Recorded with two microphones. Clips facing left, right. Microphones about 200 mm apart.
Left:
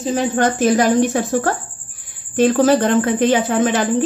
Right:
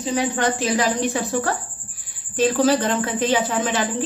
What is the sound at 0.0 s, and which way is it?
A woman's voice, 45° left (ahead or behind).